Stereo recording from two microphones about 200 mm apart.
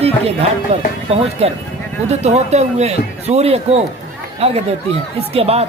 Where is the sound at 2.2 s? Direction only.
35° right (ahead or behind).